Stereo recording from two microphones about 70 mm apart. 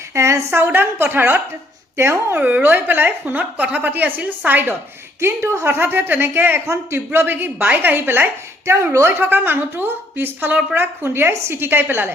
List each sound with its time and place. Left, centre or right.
0.1 s a sound: right
0.5 s a woman's voice: right
2.4 s a woman's voice: right
5.2 s a woman's voice: right